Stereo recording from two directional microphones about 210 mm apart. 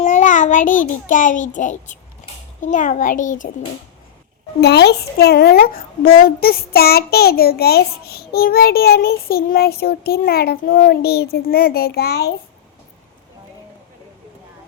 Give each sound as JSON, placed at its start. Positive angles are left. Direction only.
{"t": 0.0, "sound": "a child's voice", "side_deg": 35}
{"t": 4.6, "sound": "a woman's voice", "side_deg": 50}